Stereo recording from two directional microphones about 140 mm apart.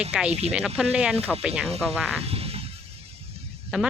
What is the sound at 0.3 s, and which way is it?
Speech, 50° right (ahead or behind).